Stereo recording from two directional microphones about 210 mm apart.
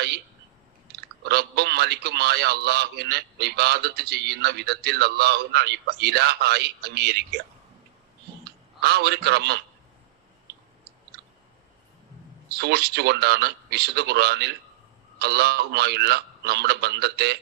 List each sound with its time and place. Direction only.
1.3 s a man's voice: 50° right (ahead or behind)
8.8 s a man's voice: 50° right (ahead or behind)
12.5 s a man's voice: 50° right (ahead or behind)